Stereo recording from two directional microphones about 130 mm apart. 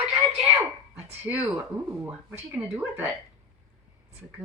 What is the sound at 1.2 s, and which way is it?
A woman's voice, 15° right (ahead or behind).